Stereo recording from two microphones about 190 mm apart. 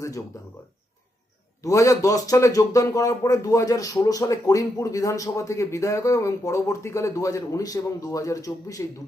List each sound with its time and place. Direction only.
0.0 s speech: 15° left (ahead or behind)
1.6 s speech: 15° left (ahead or behind)